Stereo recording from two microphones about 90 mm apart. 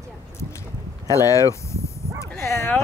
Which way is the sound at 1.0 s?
40° left (ahead or behind).